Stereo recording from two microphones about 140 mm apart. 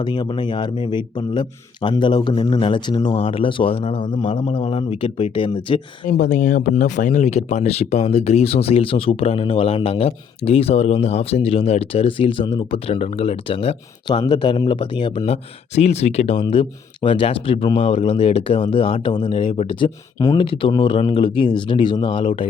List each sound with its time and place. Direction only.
0.0 s speech: 30° left (ahead or behind)
6.1 s speech: 70° left (ahead or behind); by 15.3 s 35° left (ahead or behind)
15.3 s speech: 50° left (ahead or behind)
20.1 s speech: 25° left (ahead or behind)
20.4 s speech: 40° left (ahead or behind)